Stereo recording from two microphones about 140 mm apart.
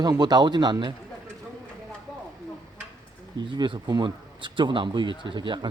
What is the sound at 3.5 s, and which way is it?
Speech, 30° right (ahead or behind).